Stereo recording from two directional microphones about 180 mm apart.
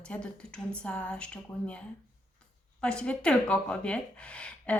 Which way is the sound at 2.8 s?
5° left (ahead or behind).